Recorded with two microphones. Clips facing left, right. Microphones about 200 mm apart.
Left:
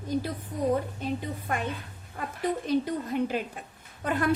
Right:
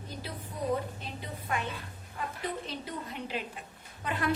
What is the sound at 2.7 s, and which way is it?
A woman's voice, 45° left (ahead or behind).